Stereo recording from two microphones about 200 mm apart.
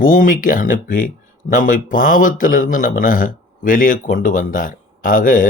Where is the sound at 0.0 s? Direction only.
45° left (ahead or behind).